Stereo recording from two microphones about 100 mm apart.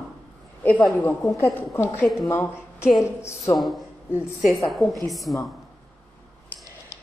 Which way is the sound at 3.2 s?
25° left (ahead or behind).